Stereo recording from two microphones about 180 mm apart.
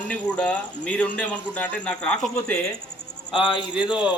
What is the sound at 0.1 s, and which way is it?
A man's voice, 5° left (ahead or behind).